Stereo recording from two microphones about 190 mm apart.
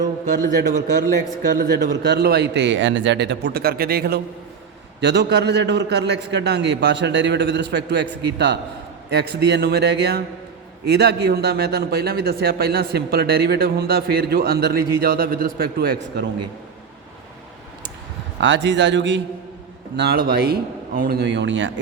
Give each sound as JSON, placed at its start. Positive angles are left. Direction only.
{"t": 0.3, "sound": "a man's voice", "side_deg": -45}
{"t": 1.5, "sound": "a man's voice", "side_deg": -60}
{"t": 18.3, "sound": "a man's voice", "side_deg": -70}
{"t": 20.0, "sound": "a man's voice", "side_deg": -55}